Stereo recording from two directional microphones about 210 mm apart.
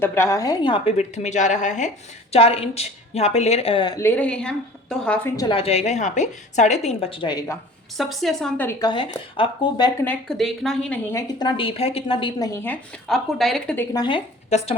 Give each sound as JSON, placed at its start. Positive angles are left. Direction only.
{"t": 0.0, "sound": "a woman's voice", "side_deg": 10}
{"t": 5.4, "sound": "a woman's voice", "side_deg": 25}
{"t": 7.9, "sound": "a woman's voice", "side_deg": 0}
{"t": 8.8, "sound": "a woman's voice", "side_deg": 20}
{"t": 10.1, "sound": "a woman's voice", "side_deg": 0}
{"t": 13.9, "sound": "a woman's voice", "side_deg": 20}